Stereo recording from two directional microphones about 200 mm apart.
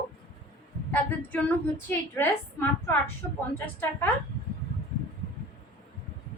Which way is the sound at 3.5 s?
10° left (ahead or behind).